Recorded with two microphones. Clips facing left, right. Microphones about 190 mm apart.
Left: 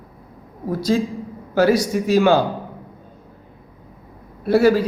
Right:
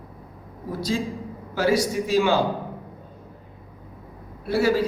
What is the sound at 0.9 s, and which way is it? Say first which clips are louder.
Speech: left 7 dB; 60° left (ahead or behind).